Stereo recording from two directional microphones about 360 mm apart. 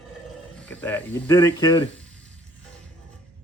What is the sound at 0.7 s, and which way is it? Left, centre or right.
A man's voice, centre.